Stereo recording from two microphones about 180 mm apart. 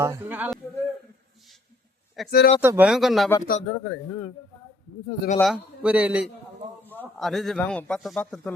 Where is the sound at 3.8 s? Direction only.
15° left (ahead or behind).